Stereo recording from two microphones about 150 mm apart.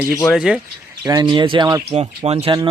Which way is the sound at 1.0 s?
25° right (ahead or behind).